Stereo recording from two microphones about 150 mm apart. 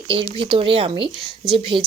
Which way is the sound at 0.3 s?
35° right (ahead or behind).